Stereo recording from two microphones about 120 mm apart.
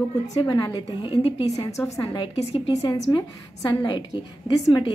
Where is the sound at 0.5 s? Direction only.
35° left (ahead or behind).